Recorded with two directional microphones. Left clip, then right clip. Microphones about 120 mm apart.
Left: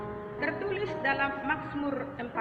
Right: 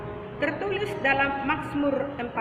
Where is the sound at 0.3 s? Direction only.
20° right (ahead or behind).